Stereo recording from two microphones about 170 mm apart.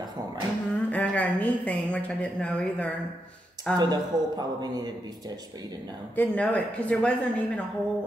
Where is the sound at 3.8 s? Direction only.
25° right (ahead or behind).